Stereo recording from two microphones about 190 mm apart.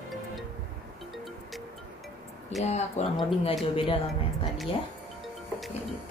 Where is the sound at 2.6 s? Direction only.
35° left (ahead or behind).